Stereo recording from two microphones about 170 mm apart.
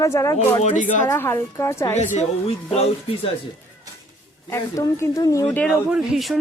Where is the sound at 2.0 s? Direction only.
45° left (ahead or behind).